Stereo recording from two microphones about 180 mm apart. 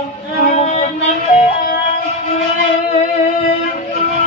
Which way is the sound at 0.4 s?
40° left (ahead or behind).